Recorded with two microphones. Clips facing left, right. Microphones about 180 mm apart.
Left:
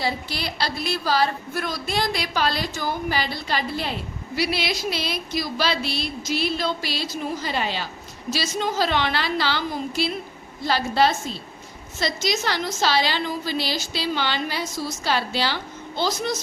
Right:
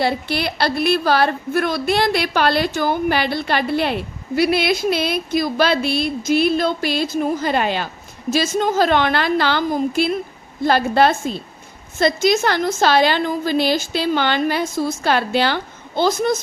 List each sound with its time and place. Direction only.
0.0 s a woman's voice: 65° right (ahead or behind)